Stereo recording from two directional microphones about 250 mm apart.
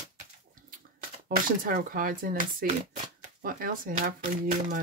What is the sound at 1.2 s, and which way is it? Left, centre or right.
Speech, right.